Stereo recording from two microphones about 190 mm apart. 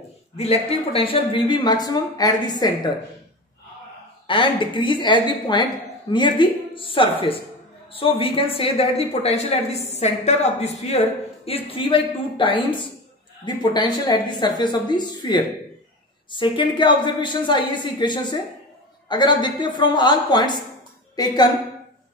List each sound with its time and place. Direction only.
0.4 s speech: 30° left (ahead or behind)
4.3 s speech: 25° left (ahead or behind)